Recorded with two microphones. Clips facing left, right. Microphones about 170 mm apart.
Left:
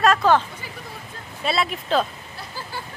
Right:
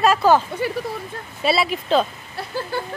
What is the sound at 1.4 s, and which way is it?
Speech, 5° right (ahead or behind).